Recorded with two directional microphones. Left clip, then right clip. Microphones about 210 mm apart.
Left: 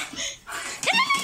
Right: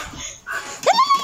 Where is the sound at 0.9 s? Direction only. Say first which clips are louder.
Right 6 dB; 25° right (ahead or behind).